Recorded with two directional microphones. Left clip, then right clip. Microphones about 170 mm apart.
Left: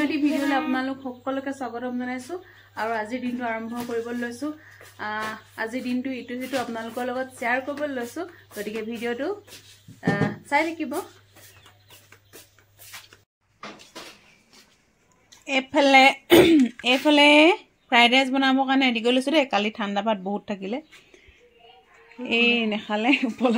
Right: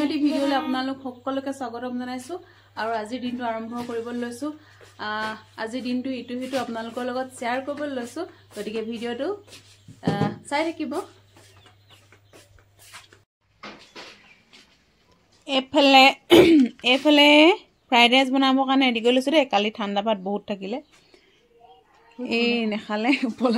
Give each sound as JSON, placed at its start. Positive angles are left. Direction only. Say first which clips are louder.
{"t": 0.0, "sound": "a woman's voice", "louder": "right 1 dB", "side_deg": -10}
{"t": 15.4, "sound": "a woman's voice", "louder": "right 1 dB", "side_deg": -20}
{"t": 22.6, "sound": "speech", "louder": "left 1 dB", "side_deg": 0}